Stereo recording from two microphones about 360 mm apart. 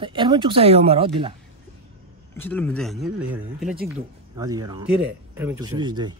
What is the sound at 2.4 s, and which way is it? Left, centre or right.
Speech, centre.